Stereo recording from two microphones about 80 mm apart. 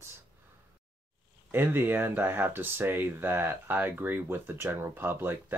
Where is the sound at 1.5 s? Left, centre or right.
Right.